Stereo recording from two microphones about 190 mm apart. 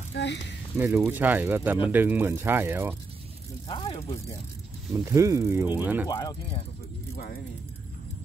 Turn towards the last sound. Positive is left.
turn(degrees=55)  # may be behind; listen again after turning